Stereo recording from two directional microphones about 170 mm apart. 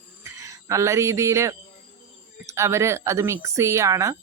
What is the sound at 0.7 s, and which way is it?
Speech, 15° right (ahead or behind).